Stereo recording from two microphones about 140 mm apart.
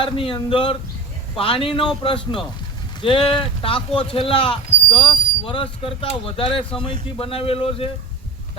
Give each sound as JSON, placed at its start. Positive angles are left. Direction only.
{"t": 0.0, "sound": "speech", "side_deg": 40}